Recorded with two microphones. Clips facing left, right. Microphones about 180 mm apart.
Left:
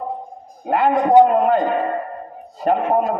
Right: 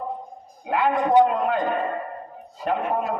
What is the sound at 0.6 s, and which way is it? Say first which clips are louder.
Speech: left 5 dB; 45° left (ahead or behind).